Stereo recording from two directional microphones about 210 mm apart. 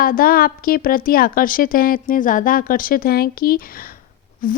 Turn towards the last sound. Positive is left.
turn(degrees=40)  # may be behind; listen again after turning